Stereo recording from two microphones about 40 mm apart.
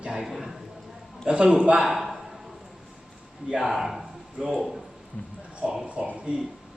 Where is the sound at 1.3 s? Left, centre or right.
Right.